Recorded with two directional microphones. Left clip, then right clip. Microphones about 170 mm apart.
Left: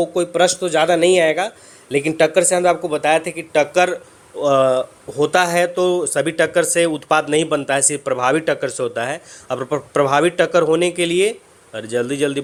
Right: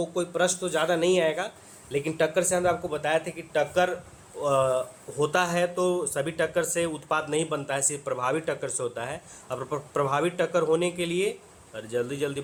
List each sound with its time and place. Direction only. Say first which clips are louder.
0.0 s speech: left 10 dB; 30° left (ahead or behind)